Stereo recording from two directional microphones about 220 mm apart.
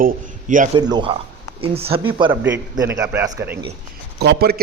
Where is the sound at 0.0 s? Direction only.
35° right (ahead or behind).